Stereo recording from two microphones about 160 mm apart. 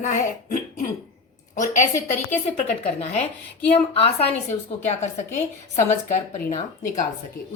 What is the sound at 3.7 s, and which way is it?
Speech, 40° left (ahead or behind).